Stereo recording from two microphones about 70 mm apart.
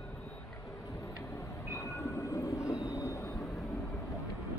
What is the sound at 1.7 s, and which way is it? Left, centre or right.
Train, left.